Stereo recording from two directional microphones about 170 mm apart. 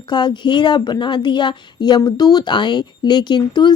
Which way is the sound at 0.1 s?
25° left (ahead or behind).